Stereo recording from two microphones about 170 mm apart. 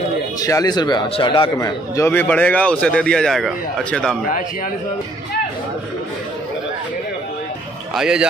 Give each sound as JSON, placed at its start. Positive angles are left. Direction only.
{"t": 0.4, "sound": "a man's voice", "side_deg": 20}
{"t": 2.0, "sound": "speech", "side_deg": 10}
{"t": 7.9, "sound": "speech", "side_deg": -5}